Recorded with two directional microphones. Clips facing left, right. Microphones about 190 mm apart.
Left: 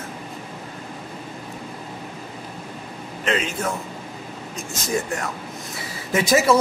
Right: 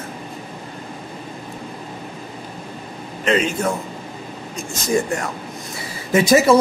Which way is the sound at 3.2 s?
Centre (ahead or behind).